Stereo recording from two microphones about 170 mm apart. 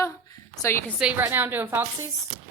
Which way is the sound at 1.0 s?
10° right (ahead or behind).